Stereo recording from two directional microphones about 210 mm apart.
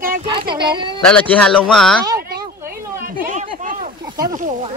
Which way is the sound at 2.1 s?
45° right (ahead or behind).